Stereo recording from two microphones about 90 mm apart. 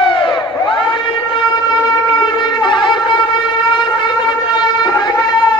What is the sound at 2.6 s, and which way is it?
Shofar, 60° left (ahead or behind).